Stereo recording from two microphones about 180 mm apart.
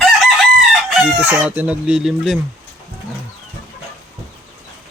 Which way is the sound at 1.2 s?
10° right (ahead or behind).